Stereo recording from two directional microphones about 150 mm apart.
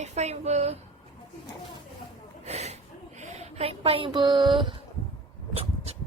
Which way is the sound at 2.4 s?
45° right (ahead or behind).